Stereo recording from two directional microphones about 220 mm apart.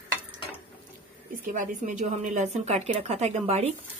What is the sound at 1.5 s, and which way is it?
A woman's voice, 35° right (ahead or behind).